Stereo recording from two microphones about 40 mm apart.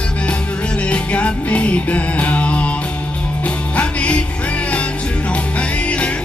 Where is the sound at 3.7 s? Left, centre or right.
Left.